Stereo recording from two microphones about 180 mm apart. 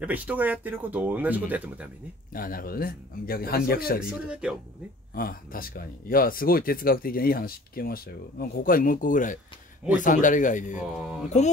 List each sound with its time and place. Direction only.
0.0 s speech: 10° right (ahead or behind)
2.3 s a man's voice: 55° left (ahead or behind)
4.0 s speech: 5° right (ahead or behind)
5.1 s speech: 55° left (ahead or behind)
11.0 s speech: centre (ahead or behind)